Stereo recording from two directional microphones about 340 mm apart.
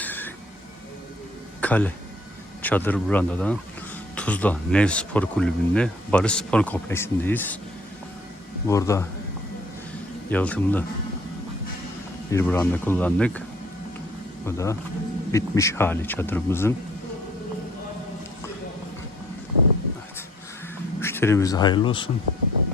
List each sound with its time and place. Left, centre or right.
0.0 s a sound: centre
1.6 s speech: centre
8.6 s speech: centre
10.2 s speech: centre
12.3 s speech: centre
14.4 s speech: centre
21.0 s speech: centre